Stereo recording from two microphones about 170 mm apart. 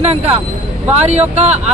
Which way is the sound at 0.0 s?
40° right (ahead or behind).